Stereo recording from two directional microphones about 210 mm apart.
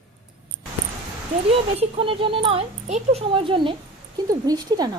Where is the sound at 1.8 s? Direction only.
25° right (ahead or behind).